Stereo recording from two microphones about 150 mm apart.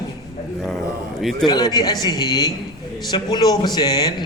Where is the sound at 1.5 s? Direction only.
25° left (ahead or behind).